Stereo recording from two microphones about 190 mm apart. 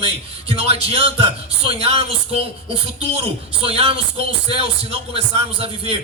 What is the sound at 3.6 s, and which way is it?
Speech, 30° right (ahead or behind).